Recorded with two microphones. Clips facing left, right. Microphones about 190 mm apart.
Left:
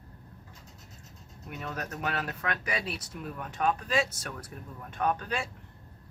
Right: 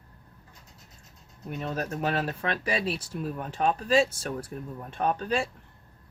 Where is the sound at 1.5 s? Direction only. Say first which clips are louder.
Right 6 dB; 30° right (ahead or behind).